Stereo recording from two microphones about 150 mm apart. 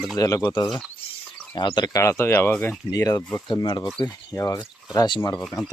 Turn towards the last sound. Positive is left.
turn(degrees=0)  # may be behind; listen again after turning